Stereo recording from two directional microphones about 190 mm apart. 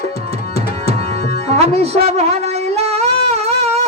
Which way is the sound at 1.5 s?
35° right (ahead or behind).